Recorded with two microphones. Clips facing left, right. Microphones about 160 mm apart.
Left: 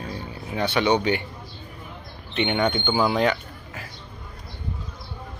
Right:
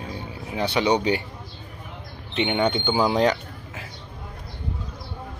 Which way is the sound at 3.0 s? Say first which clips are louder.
Right 1 dB; 30° right (ahead or behind).